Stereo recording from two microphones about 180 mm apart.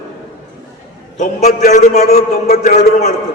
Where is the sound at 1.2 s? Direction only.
40° left (ahead or behind).